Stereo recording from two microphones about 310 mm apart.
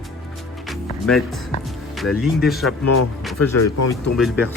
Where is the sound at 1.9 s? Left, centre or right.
Centre.